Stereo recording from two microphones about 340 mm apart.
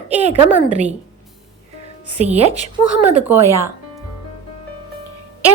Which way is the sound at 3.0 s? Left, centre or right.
Centre.